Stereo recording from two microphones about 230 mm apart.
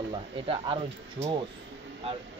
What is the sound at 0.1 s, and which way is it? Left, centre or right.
Speech, right.